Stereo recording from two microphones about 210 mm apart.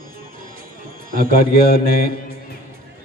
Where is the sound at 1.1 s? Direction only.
45° right (ahead or behind).